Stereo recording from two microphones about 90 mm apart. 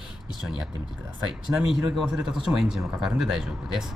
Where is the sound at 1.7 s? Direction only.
5° right (ahead or behind).